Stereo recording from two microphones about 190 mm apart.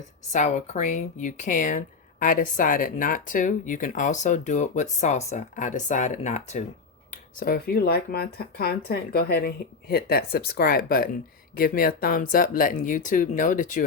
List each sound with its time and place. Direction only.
0.3 s speech: 35° left (ahead or behind)
7.1 s speech: 50° left (ahead or behind)